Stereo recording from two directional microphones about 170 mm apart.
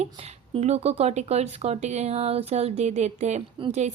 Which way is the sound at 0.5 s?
40° right (ahead or behind).